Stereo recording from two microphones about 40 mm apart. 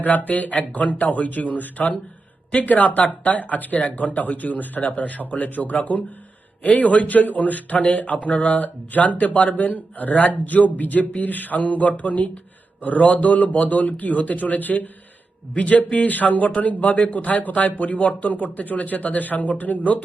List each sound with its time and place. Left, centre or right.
0.0 s a man's voice: left
3.8 s a man's voice: left
9.6 s a man's voice: left